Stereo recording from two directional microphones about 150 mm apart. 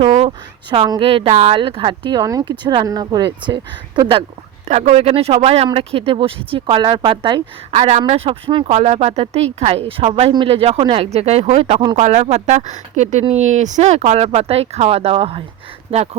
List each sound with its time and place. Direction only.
0.1 s a sound: 45° right (ahead or behind)
0.9 s speech: 35° right (ahead or behind)
1.5 s speech: 35° right (ahead or behind)
4.7 s a woman's voice: 45° right (ahead or behind)
7.8 s speech: 50° right (ahead or behind); by 8.7 s 35° right (ahead or behind)
8.7 s a woman's voice: 50° right (ahead or behind)